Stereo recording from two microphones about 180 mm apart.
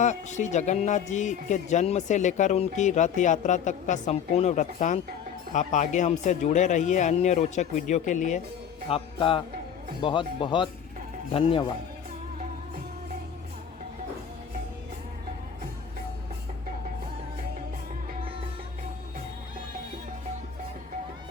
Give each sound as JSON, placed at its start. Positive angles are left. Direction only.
{"t": 0.0, "sound": "speech", "side_deg": 40}
{"t": 8.9, "sound": "speech", "side_deg": 30}